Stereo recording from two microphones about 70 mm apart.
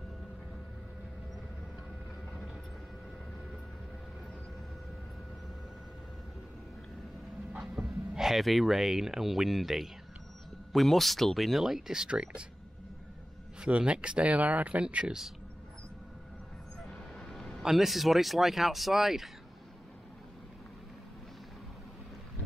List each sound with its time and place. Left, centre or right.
7.5 s speech: centre
13.6 s speech: centre
17.3 s a sound: centre
17.6 s speech: centre